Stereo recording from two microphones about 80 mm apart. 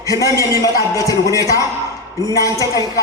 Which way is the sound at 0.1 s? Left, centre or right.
Left.